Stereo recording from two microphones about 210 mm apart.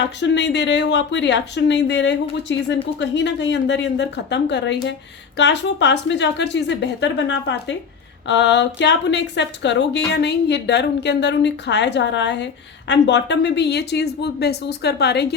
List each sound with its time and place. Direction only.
0.2 s a woman's voice: 55° left (ahead or behind)